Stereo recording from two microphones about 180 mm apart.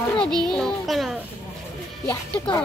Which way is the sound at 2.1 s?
20° left (ahead or behind).